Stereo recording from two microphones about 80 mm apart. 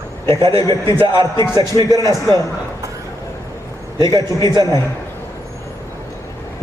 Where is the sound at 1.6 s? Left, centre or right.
Right.